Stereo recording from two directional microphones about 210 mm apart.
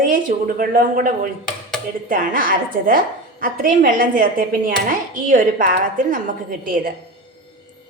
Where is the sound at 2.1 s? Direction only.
40° right (ahead or behind).